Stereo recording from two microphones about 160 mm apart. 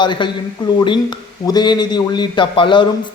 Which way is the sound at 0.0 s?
30° left (ahead or behind).